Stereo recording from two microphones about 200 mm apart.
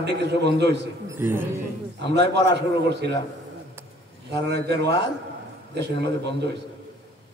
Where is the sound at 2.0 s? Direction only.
60° right (ahead or behind).